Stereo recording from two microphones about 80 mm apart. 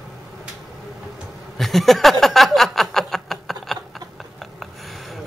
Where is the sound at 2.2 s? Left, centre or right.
Centre.